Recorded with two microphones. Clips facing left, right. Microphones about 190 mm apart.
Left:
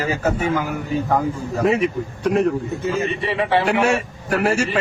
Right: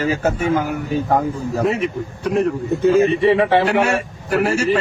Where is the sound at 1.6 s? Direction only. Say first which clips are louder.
Left 4 dB; centre (ahead or behind).